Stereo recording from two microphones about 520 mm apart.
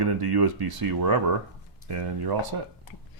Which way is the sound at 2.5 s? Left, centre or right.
Right.